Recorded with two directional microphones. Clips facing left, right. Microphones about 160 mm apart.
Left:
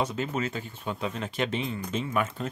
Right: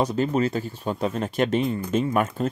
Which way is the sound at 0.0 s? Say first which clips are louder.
Right 7 dB; 35° right (ahead or behind).